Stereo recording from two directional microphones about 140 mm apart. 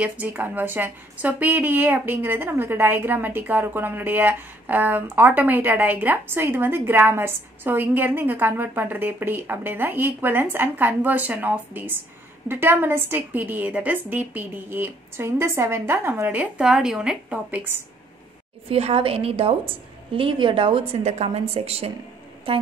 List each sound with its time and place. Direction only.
0.0 s a woman's voice: 10° right (ahead or behind)
18.7 s a woman's voice: 45° right (ahead or behind)